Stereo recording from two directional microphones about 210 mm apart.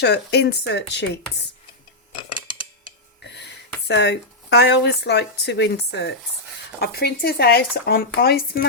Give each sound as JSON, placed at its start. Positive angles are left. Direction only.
{"t": 0.0, "sound": "speech", "side_deg": 55}
{"t": 3.2, "sound": "speech", "side_deg": 55}